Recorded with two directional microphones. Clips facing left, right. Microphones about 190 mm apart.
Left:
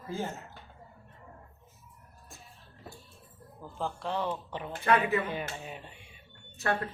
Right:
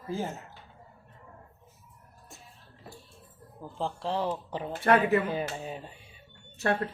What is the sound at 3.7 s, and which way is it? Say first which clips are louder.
Speech: right 2 dB; 30° right (ahead or behind).